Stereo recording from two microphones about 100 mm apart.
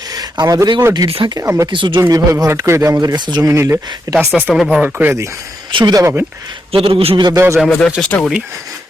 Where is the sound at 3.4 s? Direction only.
30° right (ahead or behind).